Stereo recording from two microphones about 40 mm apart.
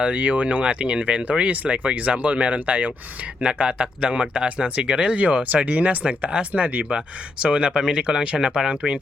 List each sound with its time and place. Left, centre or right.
0.0 s speech: right